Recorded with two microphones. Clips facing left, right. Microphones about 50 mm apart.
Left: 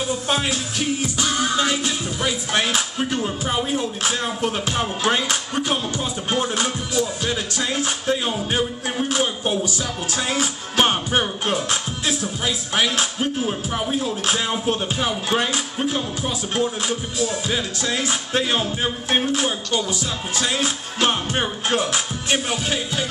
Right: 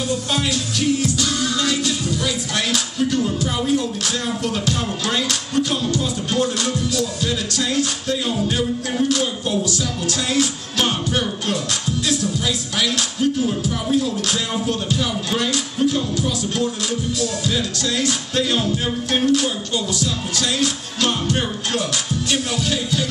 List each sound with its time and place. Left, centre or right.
0.1 s music: left